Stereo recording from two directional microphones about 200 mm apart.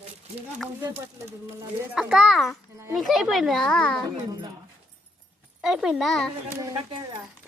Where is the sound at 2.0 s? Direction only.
Centre (ahead or behind).